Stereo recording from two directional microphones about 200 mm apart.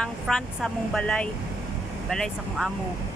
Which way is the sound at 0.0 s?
Centre (ahead or behind).